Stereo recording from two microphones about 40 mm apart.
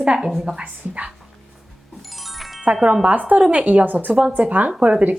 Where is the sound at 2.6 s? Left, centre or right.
Right.